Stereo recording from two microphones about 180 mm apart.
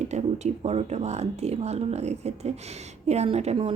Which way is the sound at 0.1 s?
40° right (ahead or behind).